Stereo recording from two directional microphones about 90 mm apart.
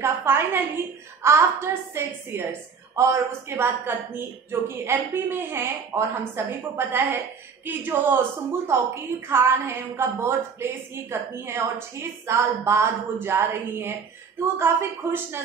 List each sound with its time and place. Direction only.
0.0 s a woman's voice: 30° right (ahead or behind)